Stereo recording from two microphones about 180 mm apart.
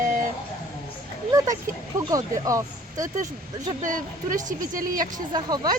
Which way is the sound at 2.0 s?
20° right (ahead or behind).